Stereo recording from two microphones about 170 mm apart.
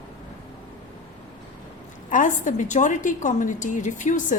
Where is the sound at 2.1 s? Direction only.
50° left (ahead or behind).